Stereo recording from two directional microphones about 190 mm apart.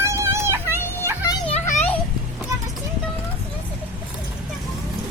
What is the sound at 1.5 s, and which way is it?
Children playing, 35° left (ahead or behind).